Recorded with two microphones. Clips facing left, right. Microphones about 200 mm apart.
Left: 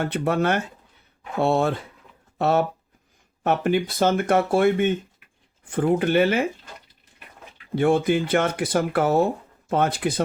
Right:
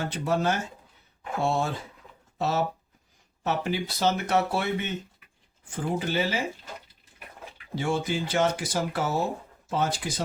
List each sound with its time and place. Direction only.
0.0 s speech: 60° left (ahead or behind)
7.8 s speech: 55° left (ahead or behind)